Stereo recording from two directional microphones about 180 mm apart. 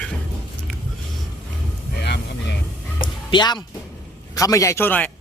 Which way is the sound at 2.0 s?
70° left (ahead or behind).